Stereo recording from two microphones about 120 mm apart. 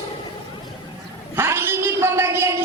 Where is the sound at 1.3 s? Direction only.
20° right (ahead or behind).